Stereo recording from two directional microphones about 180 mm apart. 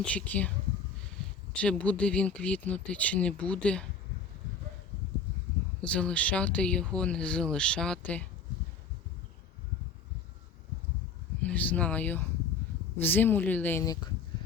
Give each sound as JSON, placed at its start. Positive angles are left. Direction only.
{"t": 0.0, "sound": "speech", "side_deg": 5}
{"t": 1.5, "sound": "speech", "side_deg": 5}
{"t": 5.8, "sound": "speech", "side_deg": 5}
{"t": 11.4, "sound": "speech", "side_deg": 10}
{"t": 13.8, "sound": "speech", "side_deg": 20}